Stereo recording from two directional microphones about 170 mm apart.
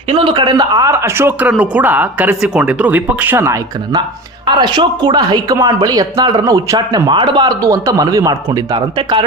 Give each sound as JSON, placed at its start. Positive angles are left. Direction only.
{"t": 0.1, "sound": "speech", "side_deg": -30}
{"t": 4.4, "sound": "speech", "side_deg": -25}